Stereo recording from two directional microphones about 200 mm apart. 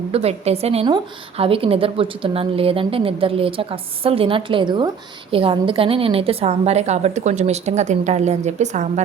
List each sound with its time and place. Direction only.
0.1 s a woman's voice: 30° right (ahead or behind)